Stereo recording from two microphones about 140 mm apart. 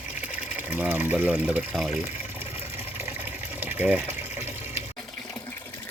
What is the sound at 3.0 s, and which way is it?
Water, 15° right (ahead or behind).